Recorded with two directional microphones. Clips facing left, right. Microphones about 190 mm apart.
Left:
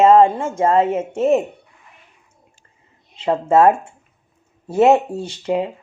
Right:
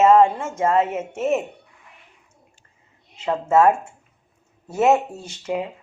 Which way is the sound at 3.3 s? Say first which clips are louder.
Left 3 dB; 35° left (ahead or behind).